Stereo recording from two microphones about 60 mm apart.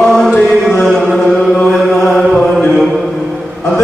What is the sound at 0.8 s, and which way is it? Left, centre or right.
Music, centre.